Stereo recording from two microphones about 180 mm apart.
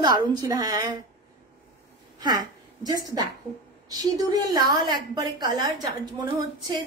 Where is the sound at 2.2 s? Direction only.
20° right (ahead or behind).